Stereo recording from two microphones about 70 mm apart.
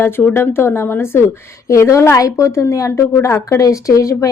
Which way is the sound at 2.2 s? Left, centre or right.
Left.